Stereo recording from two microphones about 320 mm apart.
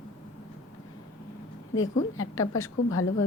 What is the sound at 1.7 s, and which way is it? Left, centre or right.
A woman's voice, left.